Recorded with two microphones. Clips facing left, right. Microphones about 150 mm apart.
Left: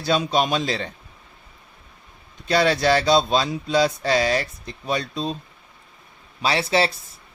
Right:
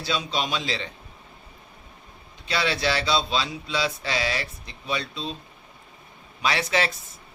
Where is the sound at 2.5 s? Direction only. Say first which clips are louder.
Left 7 dB; 45° left (ahead or behind).